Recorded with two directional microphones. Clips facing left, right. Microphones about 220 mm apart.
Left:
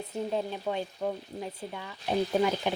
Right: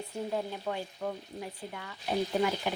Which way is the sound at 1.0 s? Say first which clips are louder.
Left 3 dB; 20° left (ahead or behind).